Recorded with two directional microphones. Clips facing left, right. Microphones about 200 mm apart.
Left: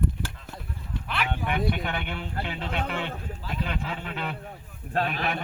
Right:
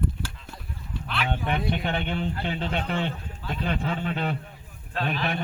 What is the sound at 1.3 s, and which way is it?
Speech, 25° right (ahead or behind).